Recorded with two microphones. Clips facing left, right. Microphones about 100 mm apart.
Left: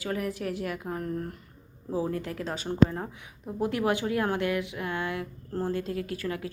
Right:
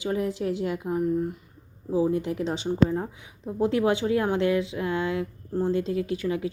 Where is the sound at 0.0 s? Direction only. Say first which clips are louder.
Right 4 dB; 25° right (ahead or behind).